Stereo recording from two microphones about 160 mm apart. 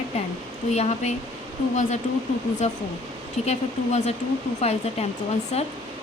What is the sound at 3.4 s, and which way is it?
Speech, 45° left (ahead or behind).